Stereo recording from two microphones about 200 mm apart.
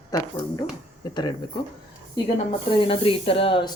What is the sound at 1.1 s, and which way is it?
Speech, 20° left (ahead or behind).